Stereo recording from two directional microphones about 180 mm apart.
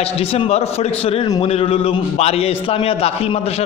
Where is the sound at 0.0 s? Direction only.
35° left (ahead or behind).